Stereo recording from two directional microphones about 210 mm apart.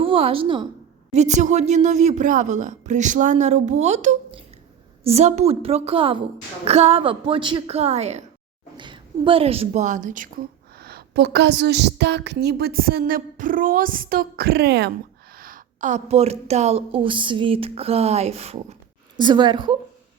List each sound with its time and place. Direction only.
0.0 s a woman's voice: 25° right (ahead or behind)
1.1 s a woman's voice: 35° right (ahead or behind)